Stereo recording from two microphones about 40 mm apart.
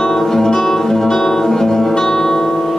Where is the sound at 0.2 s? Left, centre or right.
Centre.